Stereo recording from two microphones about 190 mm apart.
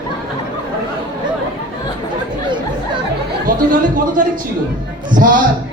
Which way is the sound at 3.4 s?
45° right (ahead or behind).